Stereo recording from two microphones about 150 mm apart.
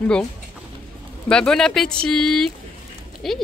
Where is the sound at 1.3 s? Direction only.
5° left (ahead or behind).